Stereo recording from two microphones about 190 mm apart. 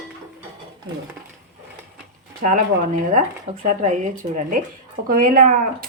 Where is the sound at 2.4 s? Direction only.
40° right (ahead or behind).